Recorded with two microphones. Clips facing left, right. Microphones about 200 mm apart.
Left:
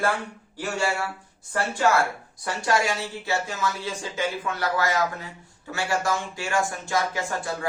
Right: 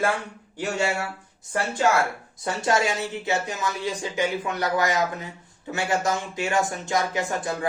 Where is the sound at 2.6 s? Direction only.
20° right (ahead or behind).